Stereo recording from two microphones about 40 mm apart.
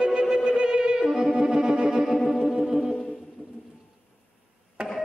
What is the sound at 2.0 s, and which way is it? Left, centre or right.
Music, centre.